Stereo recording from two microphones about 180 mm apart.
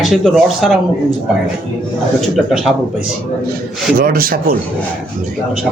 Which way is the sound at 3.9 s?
55° right (ahead or behind).